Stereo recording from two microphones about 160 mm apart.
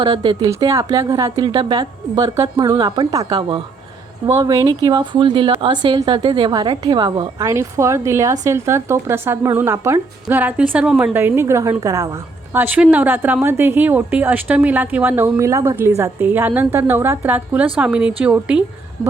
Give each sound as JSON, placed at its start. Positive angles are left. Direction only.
{"t": 0.0, "sound": "a woman's voice", "side_deg": -30}